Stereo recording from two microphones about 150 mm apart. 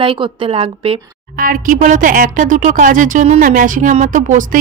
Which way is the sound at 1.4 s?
65° right (ahead or behind).